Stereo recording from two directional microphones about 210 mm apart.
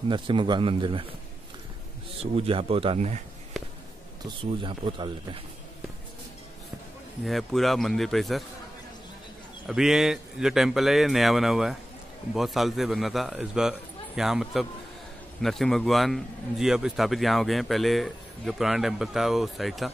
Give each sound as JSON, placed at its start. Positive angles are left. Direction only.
{"t": 0.1, "sound": "speech", "side_deg": -25}
{"t": 2.3, "sound": "speech", "side_deg": -25}
{"t": 4.2, "sound": "speech", "side_deg": -25}
{"t": 7.2, "sound": "a man's voice", "side_deg": 0}
{"t": 9.7, "sound": "a man's voice", "side_deg": 0}